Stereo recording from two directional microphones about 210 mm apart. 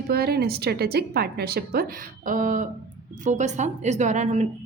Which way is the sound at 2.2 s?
40° right (ahead or behind).